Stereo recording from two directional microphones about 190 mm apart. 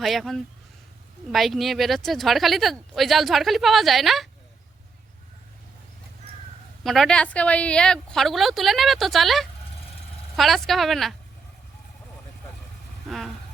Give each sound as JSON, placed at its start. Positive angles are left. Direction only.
{"t": 0.0, "sound": "a woman's voice", "side_deg": 0}
{"t": 6.8, "sound": "a woman's voice", "side_deg": 0}
{"t": 13.1, "sound": "vehicle", "side_deg": 0}